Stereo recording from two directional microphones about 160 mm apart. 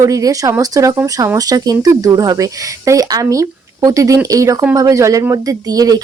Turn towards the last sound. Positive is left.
turn(degrees=-25)  # may be behind; listen again after turning